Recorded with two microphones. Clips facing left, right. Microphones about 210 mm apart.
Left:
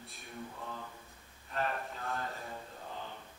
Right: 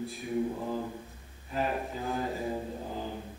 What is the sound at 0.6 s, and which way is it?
Mantra, 30° right (ahead or behind).